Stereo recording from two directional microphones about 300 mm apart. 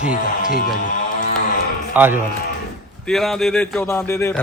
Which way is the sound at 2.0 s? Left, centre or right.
Centre.